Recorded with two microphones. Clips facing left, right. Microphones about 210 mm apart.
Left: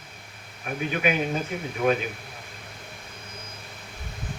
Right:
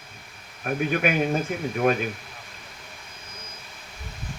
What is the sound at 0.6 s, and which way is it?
Speech, 50° right (ahead or behind).